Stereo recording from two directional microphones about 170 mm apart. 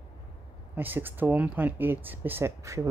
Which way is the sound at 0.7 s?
10° right (ahead or behind).